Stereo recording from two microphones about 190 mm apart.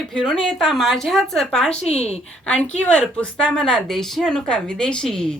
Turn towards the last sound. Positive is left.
turn(degrees=5)  # may be behind; listen again after turning